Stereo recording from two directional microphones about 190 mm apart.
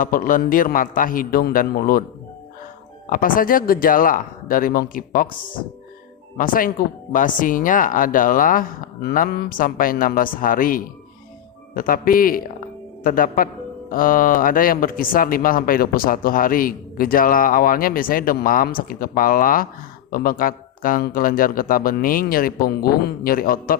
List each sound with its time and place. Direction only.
0.0 s speech: 45° left (ahead or behind)
3.1 s speech: 50° left (ahead or behind)
6.3 s speech: 45° left (ahead or behind)